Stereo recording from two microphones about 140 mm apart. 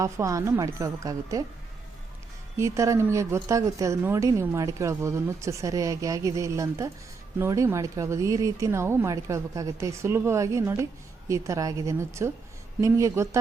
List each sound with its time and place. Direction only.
0.0 s a woman's voice: 20° right (ahead or behind)
2.6 s a woman's voice: 20° right (ahead or behind)